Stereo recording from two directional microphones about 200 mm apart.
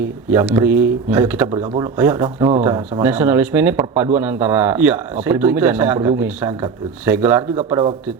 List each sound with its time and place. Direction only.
0.0 s a man's voice: 10° right (ahead or behind)
1.5 s speech: 25° right (ahead or behind)
1.8 s a man's voice: 10° right (ahead or behind)